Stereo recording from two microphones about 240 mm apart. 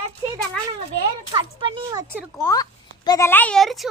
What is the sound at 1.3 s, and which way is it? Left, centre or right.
Speech, right.